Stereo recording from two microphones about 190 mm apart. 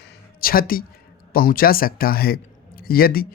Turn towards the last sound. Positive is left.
turn(degrees=50)  # may be behind; listen again after turning